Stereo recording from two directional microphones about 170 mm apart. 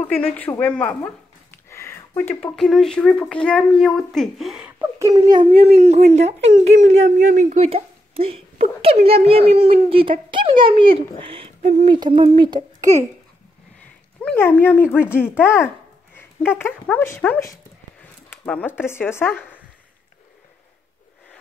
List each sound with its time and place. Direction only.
0.0 s speech: 10° left (ahead or behind); by 13.0 s 25° right (ahead or behind)
14.2 s speech: 10° left (ahead or behind)